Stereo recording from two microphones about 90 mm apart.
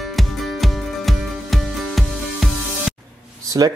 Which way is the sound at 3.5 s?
45° right (ahead or behind).